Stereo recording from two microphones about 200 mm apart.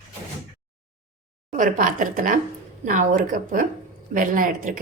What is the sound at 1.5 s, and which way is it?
A woman's voice, 40° right (ahead or behind).